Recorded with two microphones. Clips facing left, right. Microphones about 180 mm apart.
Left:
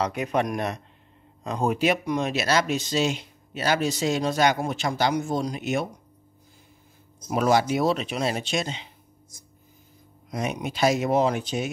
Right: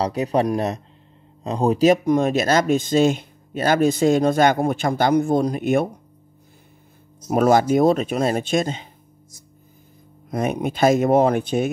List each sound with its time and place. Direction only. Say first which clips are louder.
0.0 s speech: right 5 dB; 35° right (ahead or behind); by 5.9 s 55° right (ahead or behind)
7.2 s speech: right 5 dB; 50° right (ahead or behind)
10.3 s speech: right 6 dB; 55° right (ahead or behind)